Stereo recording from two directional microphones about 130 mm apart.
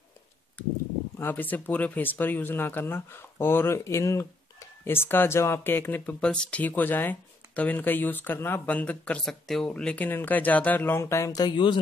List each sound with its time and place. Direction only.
1.1 s speech: 15° left (ahead or behind); by 11.8 s 35° left (ahead or behind)